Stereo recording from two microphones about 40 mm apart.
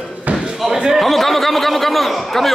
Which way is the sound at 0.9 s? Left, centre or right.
Centre.